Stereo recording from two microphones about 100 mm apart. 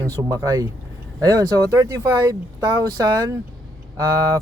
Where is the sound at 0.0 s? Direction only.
35° right (ahead or behind).